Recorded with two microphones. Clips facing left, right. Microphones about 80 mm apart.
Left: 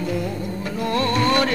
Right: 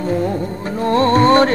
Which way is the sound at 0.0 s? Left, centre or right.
Right.